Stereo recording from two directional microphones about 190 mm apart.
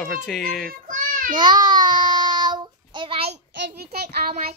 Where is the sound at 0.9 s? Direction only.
45° right (ahead or behind).